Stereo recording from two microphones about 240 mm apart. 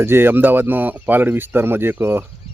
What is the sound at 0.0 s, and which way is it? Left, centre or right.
Speech, centre.